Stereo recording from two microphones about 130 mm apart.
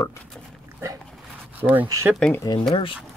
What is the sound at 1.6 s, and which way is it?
Speech, 15° right (ahead or behind).